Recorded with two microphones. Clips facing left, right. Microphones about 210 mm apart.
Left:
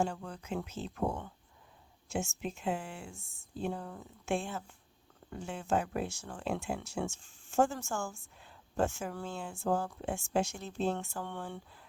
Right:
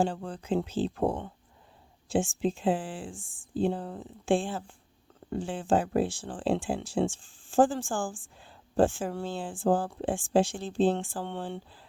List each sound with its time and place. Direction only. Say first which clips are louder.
0.0 s speech: right 5 dB; 30° right (ahead or behind)